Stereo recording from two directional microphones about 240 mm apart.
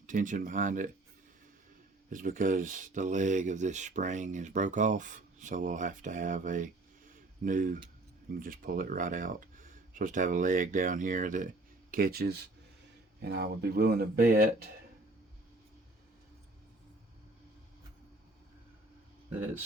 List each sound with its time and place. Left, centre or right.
0.1 s speech: right
2.0 s speech: right